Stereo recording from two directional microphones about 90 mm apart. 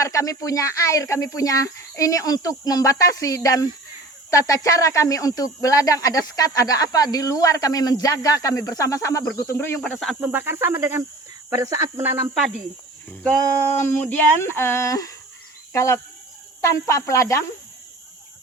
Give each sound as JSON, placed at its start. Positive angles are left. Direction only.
{"t": 0.0, "sound": "speech", "side_deg": 35}
{"t": 10.2, "sound": "speech", "side_deg": -20}
{"t": 11.5, "sound": "speech", "side_deg": -40}
{"t": 13.7, "sound": "speech", "side_deg": 20}